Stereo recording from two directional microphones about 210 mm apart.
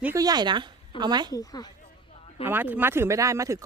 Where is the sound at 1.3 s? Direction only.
15° left (ahead or behind).